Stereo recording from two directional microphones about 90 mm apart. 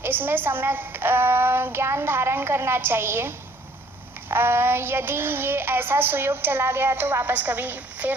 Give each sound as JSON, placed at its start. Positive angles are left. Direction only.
{"t": 0.0, "sound": "child singing", "side_deg": -25}